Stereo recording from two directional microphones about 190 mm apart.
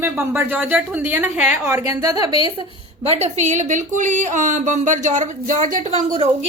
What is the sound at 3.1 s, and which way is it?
A woman's voice, 35° right (ahead or behind).